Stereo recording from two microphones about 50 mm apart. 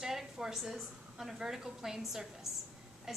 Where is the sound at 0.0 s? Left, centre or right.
Centre.